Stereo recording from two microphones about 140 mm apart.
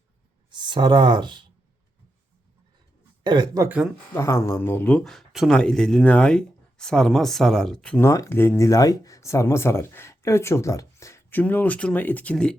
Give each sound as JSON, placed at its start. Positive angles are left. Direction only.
{"t": 0.5, "sound": "speech", "side_deg": -35}
{"t": 3.2, "sound": "speech", "side_deg": -30}
{"t": 4.1, "sound": "speech", "side_deg": 20}
{"t": 8.0, "sound": "speech", "side_deg": 20}